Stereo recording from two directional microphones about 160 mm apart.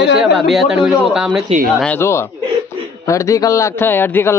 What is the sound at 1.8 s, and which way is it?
A man's voice, 10° left (ahead or behind).